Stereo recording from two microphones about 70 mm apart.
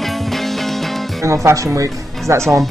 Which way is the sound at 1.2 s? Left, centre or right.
Right.